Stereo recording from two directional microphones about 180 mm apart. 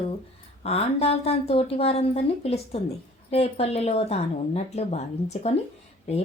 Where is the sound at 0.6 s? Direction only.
35° left (ahead or behind).